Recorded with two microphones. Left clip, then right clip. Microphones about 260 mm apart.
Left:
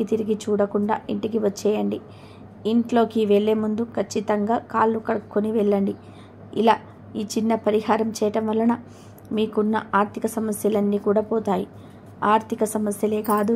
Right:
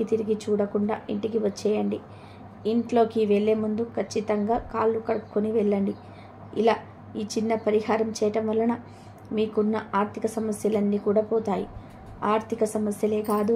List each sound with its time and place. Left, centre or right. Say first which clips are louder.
0.0 s a woman's voice: left 2 dB; left